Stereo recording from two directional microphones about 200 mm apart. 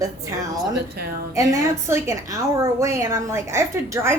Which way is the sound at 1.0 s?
45° right (ahead or behind).